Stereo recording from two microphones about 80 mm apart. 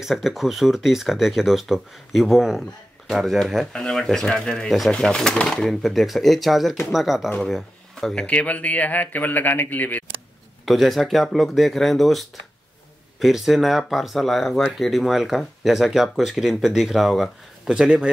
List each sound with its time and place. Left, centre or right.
0.0 s speech: centre
3.7 s speech: centre
10.6 s speech: centre